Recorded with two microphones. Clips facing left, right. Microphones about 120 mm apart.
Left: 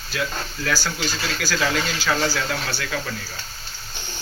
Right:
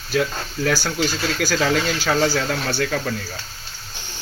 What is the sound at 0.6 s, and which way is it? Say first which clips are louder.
Speech: right 4 dB; 55° right (ahead or behind).